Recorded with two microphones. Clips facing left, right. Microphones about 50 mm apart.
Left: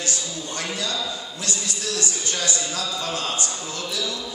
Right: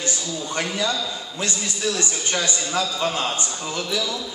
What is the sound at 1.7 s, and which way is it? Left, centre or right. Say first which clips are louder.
A man's voice: right 3 dB; right.